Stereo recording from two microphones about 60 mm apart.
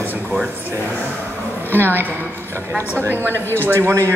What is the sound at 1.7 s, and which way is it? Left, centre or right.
Speech, right.